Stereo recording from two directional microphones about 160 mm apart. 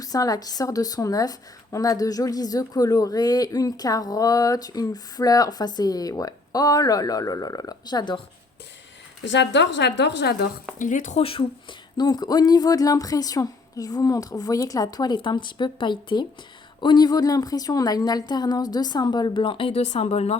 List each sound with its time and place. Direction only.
0.0 s a woman's voice: 20° left (ahead or behind)
9.4 s a woman's voice: 90° left
10.8 s speech: 50° left (ahead or behind)
11.9 s a woman's voice: 25° left (ahead or behind); by 20.4 s 40° left (ahead or behind)